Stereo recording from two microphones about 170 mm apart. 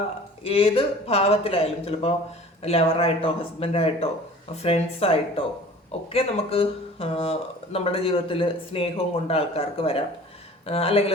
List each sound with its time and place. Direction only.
0.4 s speech: 35° left (ahead or behind)